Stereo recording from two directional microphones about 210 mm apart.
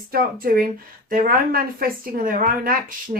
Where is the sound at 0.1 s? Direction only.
45° right (ahead or behind).